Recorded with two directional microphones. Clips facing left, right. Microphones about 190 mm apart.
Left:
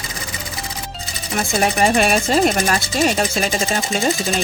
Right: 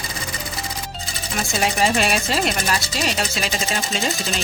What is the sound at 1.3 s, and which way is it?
Speech, 50° left (ahead or behind).